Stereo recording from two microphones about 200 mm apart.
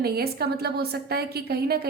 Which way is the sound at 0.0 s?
50° right (ahead or behind).